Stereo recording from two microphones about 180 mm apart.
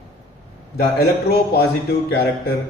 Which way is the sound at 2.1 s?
65° left (ahead or behind).